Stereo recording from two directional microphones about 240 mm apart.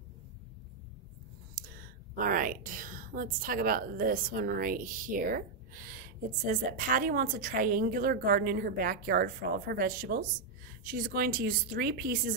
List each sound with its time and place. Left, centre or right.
1.5 s a woman's voice: right